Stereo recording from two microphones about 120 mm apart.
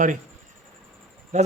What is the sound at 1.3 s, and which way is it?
Speech, 75° right (ahead or behind).